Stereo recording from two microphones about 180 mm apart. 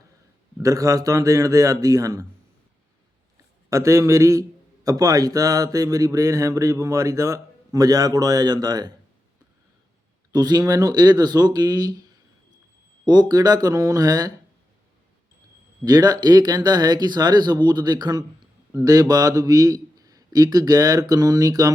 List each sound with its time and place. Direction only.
0.6 s a man's voice: 15° right (ahead or behind)
3.7 s a man's voice: 15° right (ahead or behind)
10.3 s a man's voice: 20° right (ahead or behind)
13.1 s a man's voice: 20° right (ahead or behind)
15.8 s a man's voice: 20° right (ahead or behind)